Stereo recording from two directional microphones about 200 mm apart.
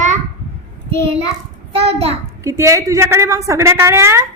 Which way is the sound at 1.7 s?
30° right (ahead or behind).